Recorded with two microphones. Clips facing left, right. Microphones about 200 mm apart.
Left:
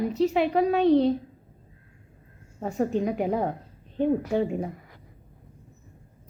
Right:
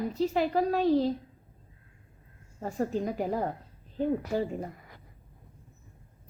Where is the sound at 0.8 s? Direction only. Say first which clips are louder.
Left 6 dB; 75° left (ahead or behind).